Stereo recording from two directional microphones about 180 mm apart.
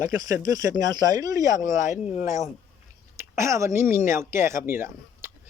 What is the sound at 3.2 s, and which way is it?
Speech, 15° right (ahead or behind).